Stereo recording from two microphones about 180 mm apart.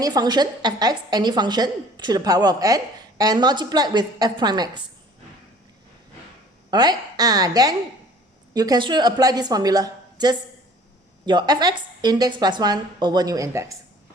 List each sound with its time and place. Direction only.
0.0 s a woman's voice: 20° right (ahead or behind)
6.7 s a woman's voice: 20° right (ahead or behind)